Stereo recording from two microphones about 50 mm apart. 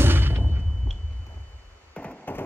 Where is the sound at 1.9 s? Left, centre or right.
Left.